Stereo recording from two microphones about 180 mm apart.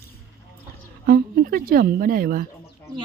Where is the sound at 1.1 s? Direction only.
55° right (ahead or behind).